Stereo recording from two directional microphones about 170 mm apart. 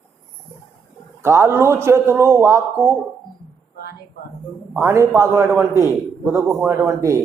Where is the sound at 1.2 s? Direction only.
15° right (ahead or behind).